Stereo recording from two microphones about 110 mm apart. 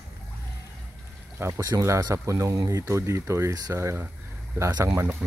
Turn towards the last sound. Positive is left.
turn(degrees=-30)  # may be behind; listen again after turning